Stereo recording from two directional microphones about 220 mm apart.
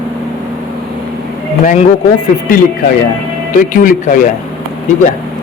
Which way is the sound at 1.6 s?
35° left (ahead or behind).